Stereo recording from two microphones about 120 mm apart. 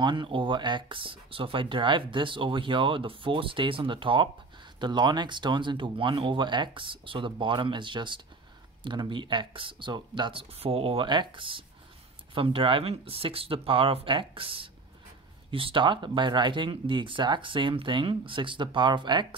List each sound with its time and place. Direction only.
0.0 s speech: 40° right (ahead or behind)